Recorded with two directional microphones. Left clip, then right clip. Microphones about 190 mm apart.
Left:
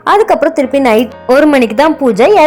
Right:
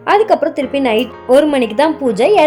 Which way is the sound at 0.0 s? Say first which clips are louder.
Left 3 dB; 15° left (ahead or behind).